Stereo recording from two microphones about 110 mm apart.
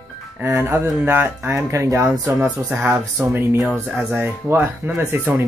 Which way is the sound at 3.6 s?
Centre (ahead or behind).